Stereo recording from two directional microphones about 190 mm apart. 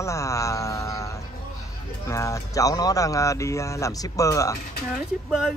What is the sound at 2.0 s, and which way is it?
Speech, 15° left (ahead or behind).